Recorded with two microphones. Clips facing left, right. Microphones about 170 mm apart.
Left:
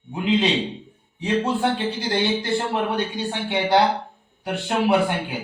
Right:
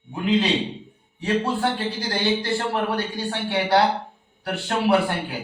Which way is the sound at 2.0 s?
20° left (ahead or behind).